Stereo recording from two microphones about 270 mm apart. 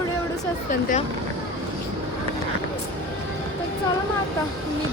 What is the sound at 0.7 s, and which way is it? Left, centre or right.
Speech, left.